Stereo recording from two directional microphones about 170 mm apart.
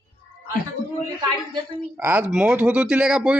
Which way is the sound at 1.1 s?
25° right (ahead or behind).